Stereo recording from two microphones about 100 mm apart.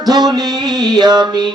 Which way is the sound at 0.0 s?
45° right (ahead or behind).